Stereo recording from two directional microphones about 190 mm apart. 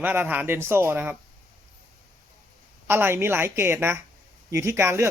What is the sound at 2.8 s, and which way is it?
A man's voice, 10° right (ahead or behind).